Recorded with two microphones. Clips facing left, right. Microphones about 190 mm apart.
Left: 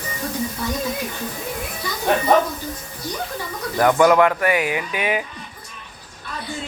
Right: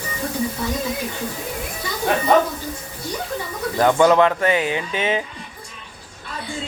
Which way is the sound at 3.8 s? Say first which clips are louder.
Even; 25° right (ahead or behind).